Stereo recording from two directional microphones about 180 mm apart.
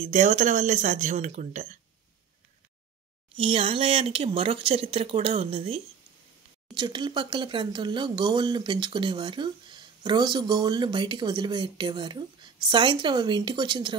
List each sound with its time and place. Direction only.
0.0 s speech: 40° right (ahead or behind)
3.3 s speech: 30° right (ahead or behind)